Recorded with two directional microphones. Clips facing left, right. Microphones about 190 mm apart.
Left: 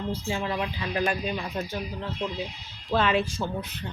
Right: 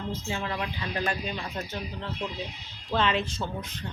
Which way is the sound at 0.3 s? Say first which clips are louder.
Left 4 dB; 20° left (ahead or behind).